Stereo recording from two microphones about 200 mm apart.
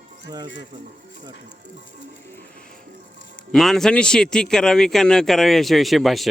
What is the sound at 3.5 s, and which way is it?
A man's voice, centre (ahead or behind).